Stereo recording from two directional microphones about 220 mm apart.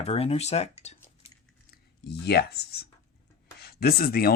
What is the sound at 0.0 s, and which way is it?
Speech, 30° left (ahead or behind).